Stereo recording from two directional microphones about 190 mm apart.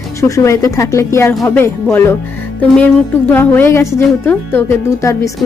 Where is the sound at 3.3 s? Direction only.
10° left (ahead or behind).